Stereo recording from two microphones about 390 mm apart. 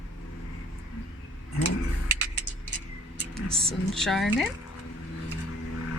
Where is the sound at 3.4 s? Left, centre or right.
Centre.